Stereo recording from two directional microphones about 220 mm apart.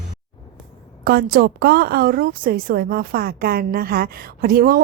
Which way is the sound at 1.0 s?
40° right (ahead or behind).